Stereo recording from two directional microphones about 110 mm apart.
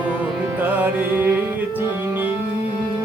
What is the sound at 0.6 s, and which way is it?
Music, 15° right (ahead or behind).